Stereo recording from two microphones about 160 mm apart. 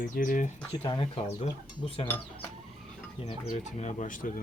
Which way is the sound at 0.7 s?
30° left (ahead or behind).